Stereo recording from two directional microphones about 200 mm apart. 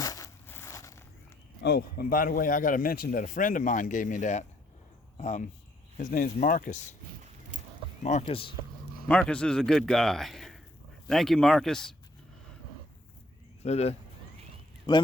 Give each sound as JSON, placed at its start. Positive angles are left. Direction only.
{"t": 0.0, "sound": "a sound", "side_deg": 15}
{"t": 1.6, "sound": "speech", "side_deg": 50}
{"t": 7.5, "sound": "a sound", "side_deg": -40}
{"t": 8.1, "sound": "speech", "side_deg": 35}
{"t": 9.0, "sound": "a man's voice", "side_deg": 5}
{"t": 13.6, "sound": "speech", "side_deg": 35}